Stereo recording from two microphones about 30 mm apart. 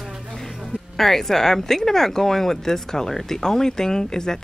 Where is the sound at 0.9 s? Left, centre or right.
Centre.